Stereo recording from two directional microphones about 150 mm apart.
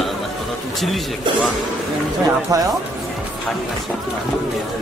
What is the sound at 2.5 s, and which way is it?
Speech, 25° right (ahead or behind).